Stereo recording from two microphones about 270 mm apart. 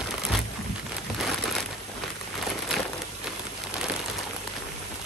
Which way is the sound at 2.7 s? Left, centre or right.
Centre.